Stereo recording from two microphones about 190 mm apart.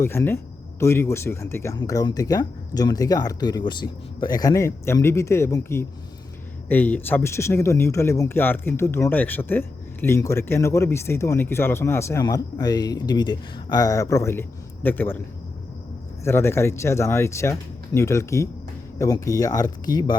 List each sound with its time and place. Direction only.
0.0 s speech: 15° left (ahead or behind)
16.2 s speech: 15° left (ahead or behind)